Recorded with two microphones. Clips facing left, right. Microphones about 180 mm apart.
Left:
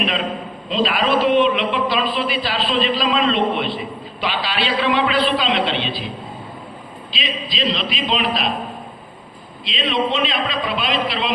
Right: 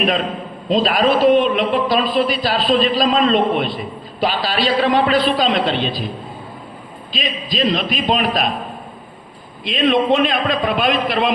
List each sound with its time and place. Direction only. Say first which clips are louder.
0.7 s a man's voice: right 3 dB; 40° right (ahead or behind)
7.1 s a man's voice: right 4 dB; 45° right (ahead or behind)
9.6 s a man's voice: right 6 dB; 50° right (ahead or behind)